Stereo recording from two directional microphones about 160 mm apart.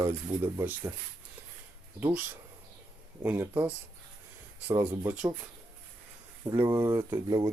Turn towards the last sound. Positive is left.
turn(degrees=-20)  # may be behind; listen again after turning